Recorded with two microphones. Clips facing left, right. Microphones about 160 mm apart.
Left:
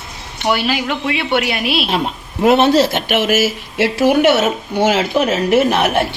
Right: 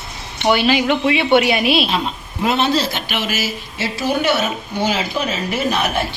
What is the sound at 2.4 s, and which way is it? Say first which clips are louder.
Speech: left 6 dB; 60° left (ahead or behind).